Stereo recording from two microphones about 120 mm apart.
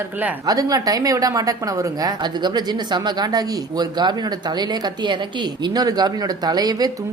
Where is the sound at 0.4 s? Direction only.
30° right (ahead or behind).